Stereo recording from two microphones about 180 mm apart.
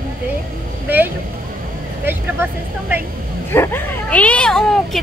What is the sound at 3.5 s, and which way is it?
Speech, 10° left (ahead or behind).